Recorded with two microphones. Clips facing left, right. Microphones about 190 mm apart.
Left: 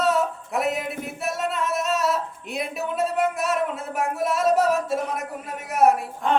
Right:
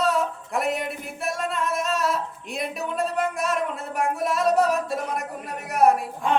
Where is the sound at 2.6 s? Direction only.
5° left (ahead or behind).